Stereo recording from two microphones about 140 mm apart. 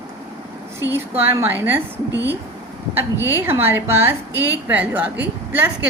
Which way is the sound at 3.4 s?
15° right (ahead or behind).